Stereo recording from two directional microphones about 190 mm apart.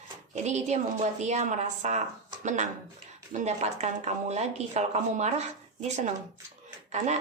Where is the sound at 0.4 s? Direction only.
35° right (ahead or behind).